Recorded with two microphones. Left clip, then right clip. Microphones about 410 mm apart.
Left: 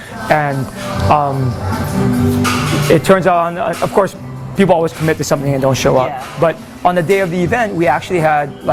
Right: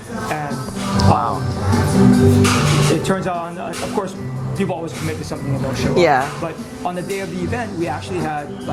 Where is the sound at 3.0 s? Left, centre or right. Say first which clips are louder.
Left 10 dB; left.